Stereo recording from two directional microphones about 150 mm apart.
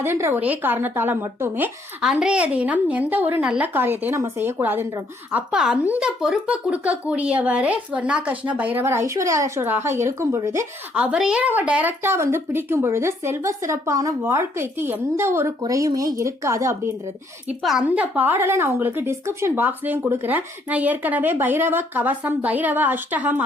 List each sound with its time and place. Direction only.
0.0 s a woman's voice: 15° right (ahead or behind)
17.6 s a woman's voice: centre (ahead or behind)